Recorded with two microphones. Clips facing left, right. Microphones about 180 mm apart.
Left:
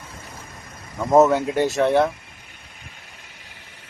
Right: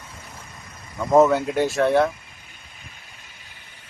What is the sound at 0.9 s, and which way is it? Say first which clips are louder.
Speech: left 1 dB; 10° left (ahead or behind).